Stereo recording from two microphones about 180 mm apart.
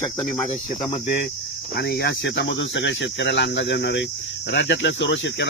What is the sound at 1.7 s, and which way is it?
Speech, 65° left (ahead or behind).